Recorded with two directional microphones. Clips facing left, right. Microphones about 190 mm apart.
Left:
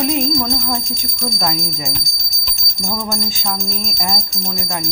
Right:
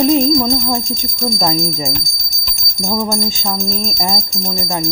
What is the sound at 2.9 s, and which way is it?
Speech, 25° right (ahead or behind).